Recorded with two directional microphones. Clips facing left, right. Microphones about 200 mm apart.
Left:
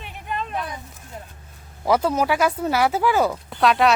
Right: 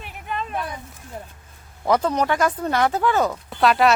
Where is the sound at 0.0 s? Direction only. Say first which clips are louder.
Even; centre (ahead or behind).